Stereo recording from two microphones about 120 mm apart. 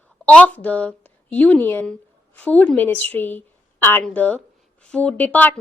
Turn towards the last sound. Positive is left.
turn(degrees=15)  # may be behind; listen again after turning